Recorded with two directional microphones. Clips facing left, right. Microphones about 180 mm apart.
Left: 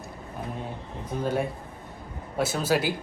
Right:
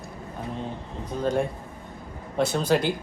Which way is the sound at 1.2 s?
5° left (ahead or behind).